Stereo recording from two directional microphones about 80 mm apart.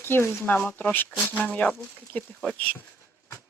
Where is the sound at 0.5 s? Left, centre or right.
Centre.